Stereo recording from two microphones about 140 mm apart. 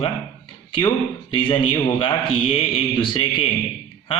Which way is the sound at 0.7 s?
35° left (ahead or behind).